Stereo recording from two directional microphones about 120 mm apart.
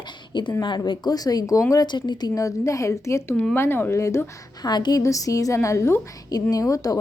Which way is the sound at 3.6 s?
20° left (ahead or behind).